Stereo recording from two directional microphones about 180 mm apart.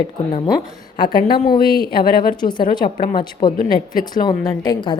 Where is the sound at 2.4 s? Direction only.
25° left (ahead or behind).